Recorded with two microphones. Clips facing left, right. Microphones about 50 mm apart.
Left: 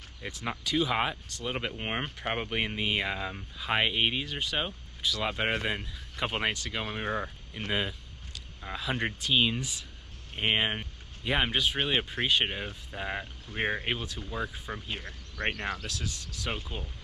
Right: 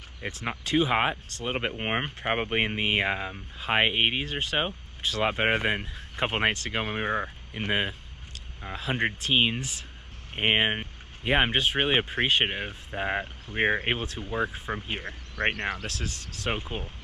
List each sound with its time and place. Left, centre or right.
0.2 s speech: right
15.9 s speech: right
16.4 s speech: right